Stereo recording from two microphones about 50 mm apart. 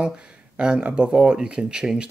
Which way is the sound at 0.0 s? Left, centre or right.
Centre.